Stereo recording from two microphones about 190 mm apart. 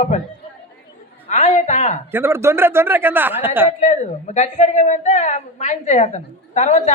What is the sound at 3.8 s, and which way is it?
A woman's voice, 40° left (ahead or behind).